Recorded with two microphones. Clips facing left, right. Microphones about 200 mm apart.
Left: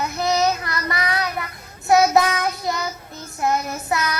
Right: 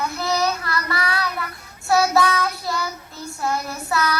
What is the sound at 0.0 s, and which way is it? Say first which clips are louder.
Child singing: left 2 dB; 20° left (ahead or behind).